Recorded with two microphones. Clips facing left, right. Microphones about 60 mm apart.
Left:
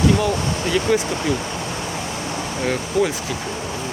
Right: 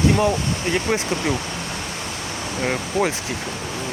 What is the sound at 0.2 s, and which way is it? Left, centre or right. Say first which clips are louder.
Speech: right 1 dB; right.